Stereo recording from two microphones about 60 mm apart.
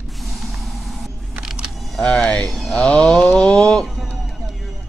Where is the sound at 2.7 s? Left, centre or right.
Centre.